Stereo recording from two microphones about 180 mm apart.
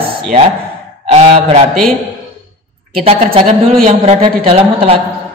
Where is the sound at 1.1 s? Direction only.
35° right (ahead or behind).